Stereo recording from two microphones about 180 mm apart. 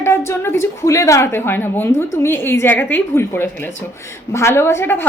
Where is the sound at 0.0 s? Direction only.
15° left (ahead or behind).